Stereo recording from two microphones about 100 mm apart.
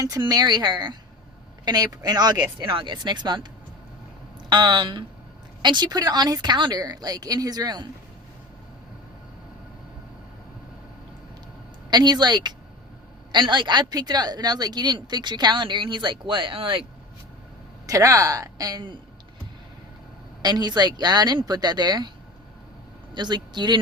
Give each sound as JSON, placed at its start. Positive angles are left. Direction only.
{"t": 0.0, "sound": "a woman's voice", "side_deg": -40}
{"t": 4.4, "sound": "a woman's voice", "side_deg": -50}
{"t": 11.9, "sound": "speech", "side_deg": -45}
{"t": 17.8, "sound": "a woman's voice", "side_deg": -35}
{"t": 20.4, "sound": "speech", "side_deg": -45}
{"t": 23.1, "sound": "speech", "side_deg": -45}